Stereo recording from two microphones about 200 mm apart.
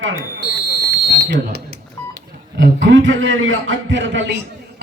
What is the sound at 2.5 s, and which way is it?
A man's voice, 65° right (ahead or behind).